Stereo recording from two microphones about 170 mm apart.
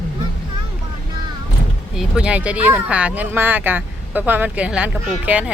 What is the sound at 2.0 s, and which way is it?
Speech, 5° right (ahead or behind).